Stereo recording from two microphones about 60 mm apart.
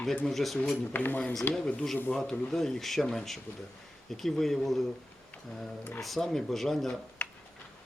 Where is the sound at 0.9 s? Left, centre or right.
Left.